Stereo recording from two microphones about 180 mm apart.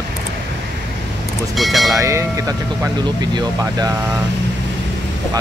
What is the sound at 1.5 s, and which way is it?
Speech, centre (ahead or behind).